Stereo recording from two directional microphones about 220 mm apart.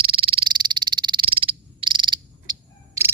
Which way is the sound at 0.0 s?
25° right (ahead or behind).